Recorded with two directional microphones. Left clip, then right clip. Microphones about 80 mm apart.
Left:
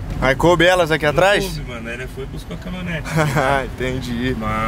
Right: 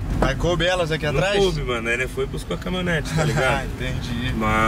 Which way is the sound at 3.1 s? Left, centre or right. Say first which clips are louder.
Left 7 dB; left.